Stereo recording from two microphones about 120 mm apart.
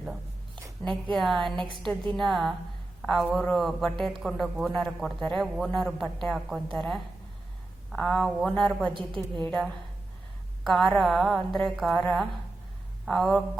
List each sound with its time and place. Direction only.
0.8 s a woman's voice: 10° left (ahead or behind)
8.9 s a woman's voice: 45° right (ahead or behind)
9.5 s speech: centre (ahead or behind)